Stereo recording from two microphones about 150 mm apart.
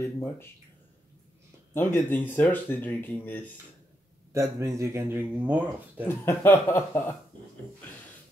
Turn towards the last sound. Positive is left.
turn(degrees=15)  # may be behind; listen again after turning